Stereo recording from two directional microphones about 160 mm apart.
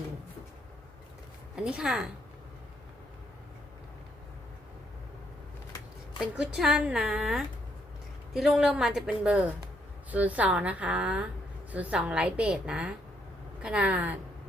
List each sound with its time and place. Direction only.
1.5 s a woman's voice: 5° right (ahead or behind)
6.1 s a woman's voice: 5° right (ahead or behind)
10.1 s a woman's voice: 10° right (ahead or behind)